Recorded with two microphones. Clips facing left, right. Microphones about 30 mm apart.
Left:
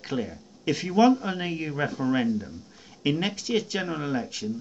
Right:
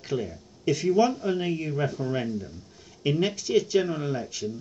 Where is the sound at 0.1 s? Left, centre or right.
Centre.